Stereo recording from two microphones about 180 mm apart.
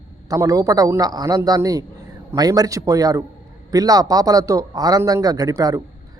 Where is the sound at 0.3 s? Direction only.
20° right (ahead or behind).